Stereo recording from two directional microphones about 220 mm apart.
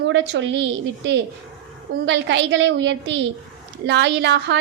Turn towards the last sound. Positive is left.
turn(degrees=-55)  # may be behind; listen again after turning